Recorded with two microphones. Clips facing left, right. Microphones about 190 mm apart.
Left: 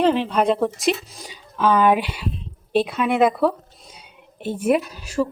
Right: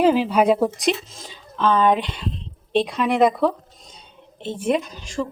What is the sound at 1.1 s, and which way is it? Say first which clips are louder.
A woman's voice: even; 15° left (ahead or behind).